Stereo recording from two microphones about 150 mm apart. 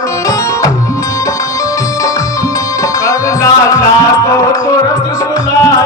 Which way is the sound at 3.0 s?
20° left (ahead or behind).